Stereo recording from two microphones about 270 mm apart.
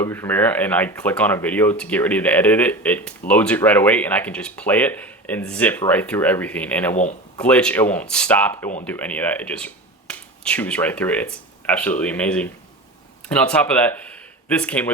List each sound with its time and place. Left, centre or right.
0.0 s speech: centre
6.9 s speech: left
7.3 s speech: centre